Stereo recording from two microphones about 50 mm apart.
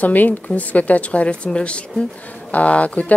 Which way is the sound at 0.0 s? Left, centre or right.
Left.